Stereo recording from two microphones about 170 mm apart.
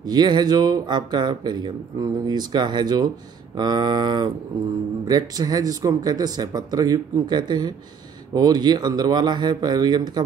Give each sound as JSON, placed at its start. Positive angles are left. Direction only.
{"t": 0.0, "sound": "speech", "side_deg": -25}